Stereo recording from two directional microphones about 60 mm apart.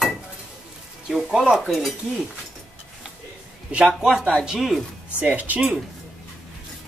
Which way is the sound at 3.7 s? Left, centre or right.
Right.